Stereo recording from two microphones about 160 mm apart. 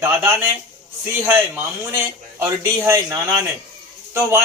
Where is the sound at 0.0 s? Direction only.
15° right (ahead or behind).